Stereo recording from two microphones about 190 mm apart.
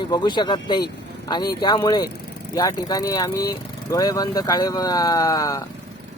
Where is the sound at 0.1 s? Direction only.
25° left (ahead or behind).